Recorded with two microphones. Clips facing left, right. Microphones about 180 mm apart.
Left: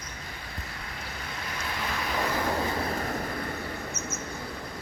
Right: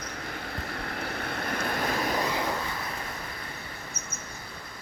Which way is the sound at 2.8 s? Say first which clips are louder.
Left 7 dB; 45° left (ahead or behind).